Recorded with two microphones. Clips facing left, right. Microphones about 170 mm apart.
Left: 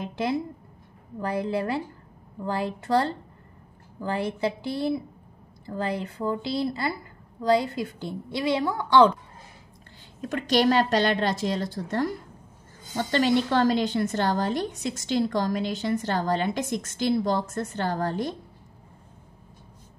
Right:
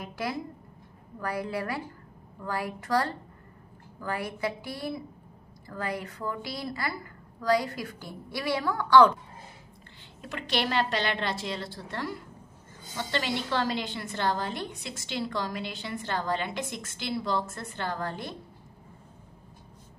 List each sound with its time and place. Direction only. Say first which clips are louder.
0.0 s a woman's voice: left 6 dB; 25° left (ahead or behind)
10.2 s a woman's voice: left 9 dB; 45° left (ahead or behind)